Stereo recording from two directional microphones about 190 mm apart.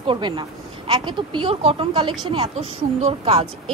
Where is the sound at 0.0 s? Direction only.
25° right (ahead or behind).